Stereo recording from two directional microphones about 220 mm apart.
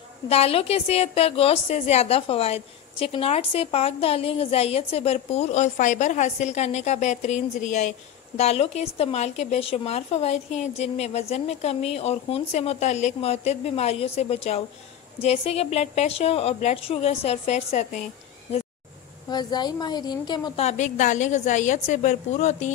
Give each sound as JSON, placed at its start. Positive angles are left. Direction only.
{"t": 0.3, "sound": "a woman's voice", "side_deg": 25}
{"t": 19.2, "sound": "a woman's voice", "side_deg": 20}